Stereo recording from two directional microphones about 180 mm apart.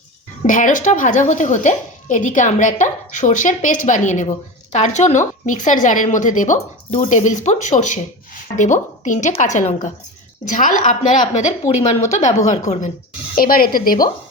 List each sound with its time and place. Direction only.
0.4 s speech: 45° left (ahead or behind)